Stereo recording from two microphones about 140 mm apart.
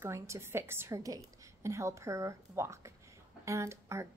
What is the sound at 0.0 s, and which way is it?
A woman's voice, 20° right (ahead or behind).